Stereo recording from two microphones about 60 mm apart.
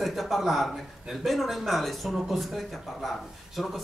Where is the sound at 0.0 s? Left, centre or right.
Centre.